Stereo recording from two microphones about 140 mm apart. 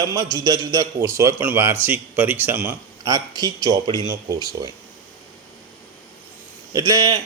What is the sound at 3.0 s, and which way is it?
A man's voice, 25° right (ahead or behind).